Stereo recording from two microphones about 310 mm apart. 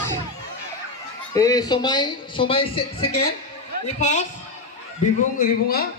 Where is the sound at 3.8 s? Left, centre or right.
Left.